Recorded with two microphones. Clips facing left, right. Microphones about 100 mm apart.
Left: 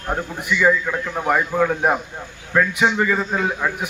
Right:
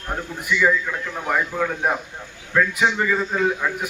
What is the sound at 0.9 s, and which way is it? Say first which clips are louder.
A man's voice: left 4 dB; 15° left (ahead or behind).